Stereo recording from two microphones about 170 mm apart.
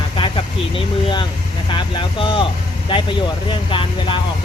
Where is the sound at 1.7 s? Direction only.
30° left (ahead or behind).